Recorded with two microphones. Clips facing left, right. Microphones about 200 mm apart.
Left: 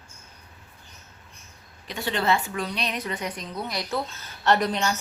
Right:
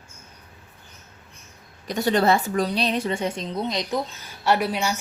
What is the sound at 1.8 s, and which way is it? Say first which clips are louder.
A woman's voice: right 6 dB; 40° right (ahead or behind).